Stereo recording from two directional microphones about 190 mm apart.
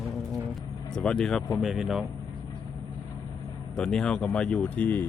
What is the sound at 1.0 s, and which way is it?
Speech, 5° left (ahead or behind).